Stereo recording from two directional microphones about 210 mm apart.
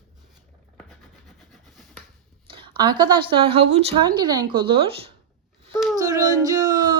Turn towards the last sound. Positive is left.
turn(degrees=-20)  # may be behind; listen again after turning